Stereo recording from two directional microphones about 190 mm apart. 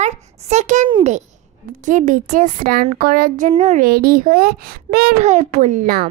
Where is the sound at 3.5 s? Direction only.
35° right (ahead or behind).